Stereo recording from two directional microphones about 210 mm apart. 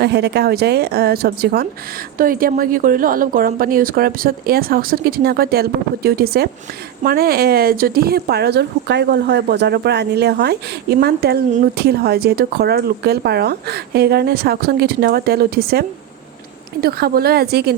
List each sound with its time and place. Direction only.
0.0 s speech: 50° right (ahead or behind)